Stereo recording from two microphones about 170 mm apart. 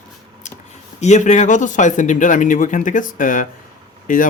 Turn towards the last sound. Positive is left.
turn(degrees=50)  # may be behind; listen again after turning